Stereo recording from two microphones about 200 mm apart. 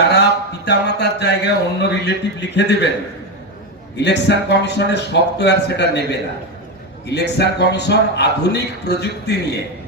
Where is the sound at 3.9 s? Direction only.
60° left (ahead or behind).